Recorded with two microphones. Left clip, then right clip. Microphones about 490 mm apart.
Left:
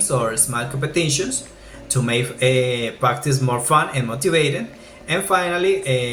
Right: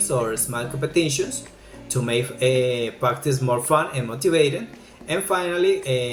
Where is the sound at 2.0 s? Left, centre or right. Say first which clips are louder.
Left 2 dB; right.